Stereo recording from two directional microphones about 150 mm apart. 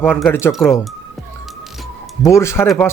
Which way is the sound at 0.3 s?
15° left (ahead or behind).